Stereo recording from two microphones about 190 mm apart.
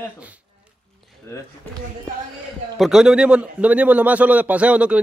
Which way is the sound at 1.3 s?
15° left (ahead or behind).